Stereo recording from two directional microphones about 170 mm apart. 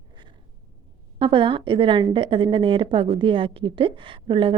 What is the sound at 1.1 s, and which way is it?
A woman's voice, 30° right (ahead or behind).